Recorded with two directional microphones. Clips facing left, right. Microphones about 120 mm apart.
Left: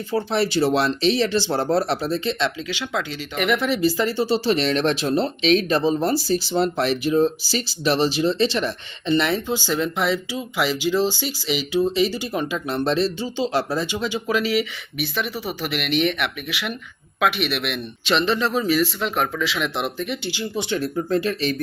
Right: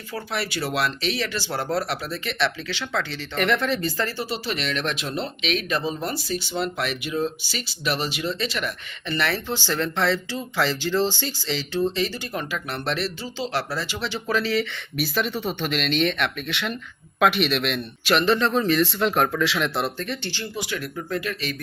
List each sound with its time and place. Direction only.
0.1 s speech: 25° left (ahead or behind)
4.2 s speech: 30° left (ahead or behind); by 14.7 s 10° left (ahead or behind)
14.9 s speech: centre (ahead or behind)
20.6 s speech: 30° left (ahead or behind)